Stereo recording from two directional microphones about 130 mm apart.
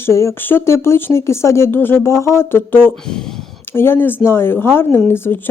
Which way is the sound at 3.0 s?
5° left (ahead or behind).